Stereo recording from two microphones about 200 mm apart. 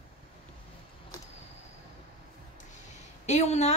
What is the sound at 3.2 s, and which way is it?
Speech, 35° left (ahead or behind).